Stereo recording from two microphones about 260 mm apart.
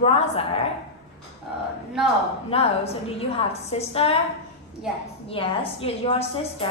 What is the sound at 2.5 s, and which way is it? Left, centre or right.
A woman's voice, left.